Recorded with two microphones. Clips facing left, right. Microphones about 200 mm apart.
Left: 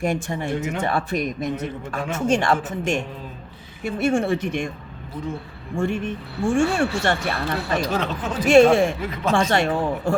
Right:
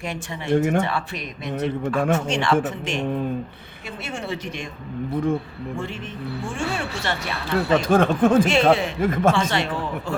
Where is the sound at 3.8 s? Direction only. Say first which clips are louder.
Left 11 dB; 50° left (ahead or behind).